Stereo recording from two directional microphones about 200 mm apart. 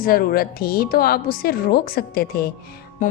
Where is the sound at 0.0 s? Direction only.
45° left (ahead or behind).